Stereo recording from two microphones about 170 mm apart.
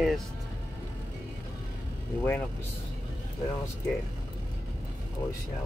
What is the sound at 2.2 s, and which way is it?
Speech, 10° left (ahead or behind).